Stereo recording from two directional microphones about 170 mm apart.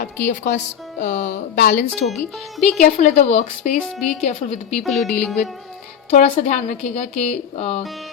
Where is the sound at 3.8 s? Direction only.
5° left (ahead or behind).